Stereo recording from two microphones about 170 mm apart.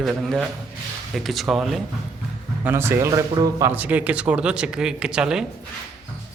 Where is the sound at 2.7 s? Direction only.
15° right (ahead or behind).